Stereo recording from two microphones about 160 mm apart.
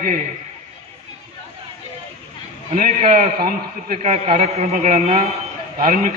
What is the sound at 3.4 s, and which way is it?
A man's voice, 60° right (ahead or behind).